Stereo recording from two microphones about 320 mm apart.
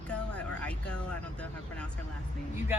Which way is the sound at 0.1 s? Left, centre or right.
Centre.